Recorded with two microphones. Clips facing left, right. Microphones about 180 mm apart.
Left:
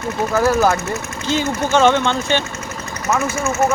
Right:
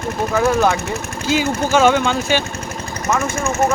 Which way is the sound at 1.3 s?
10° right (ahead or behind).